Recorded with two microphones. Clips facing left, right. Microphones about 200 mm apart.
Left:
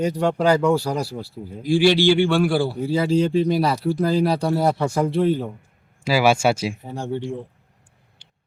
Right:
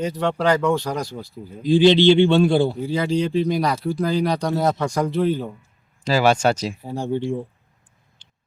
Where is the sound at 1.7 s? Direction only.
20° right (ahead or behind).